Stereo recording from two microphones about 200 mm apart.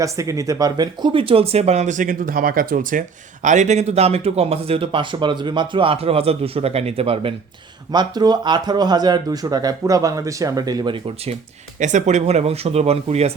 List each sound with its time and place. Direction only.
0.0 s speech: 15° right (ahead or behind)
11.8 s speech: 35° right (ahead or behind)